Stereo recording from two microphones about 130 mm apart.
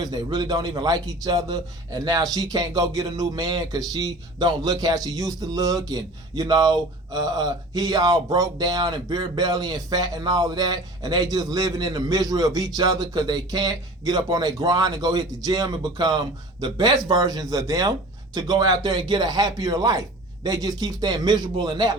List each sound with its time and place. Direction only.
0.0 s a man's voice: 30° right (ahead or behind)